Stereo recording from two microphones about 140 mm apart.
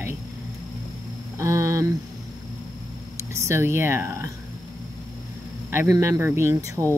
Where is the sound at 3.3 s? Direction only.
20° right (ahead or behind).